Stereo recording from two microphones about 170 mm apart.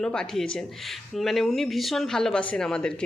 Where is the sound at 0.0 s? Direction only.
5° left (ahead or behind).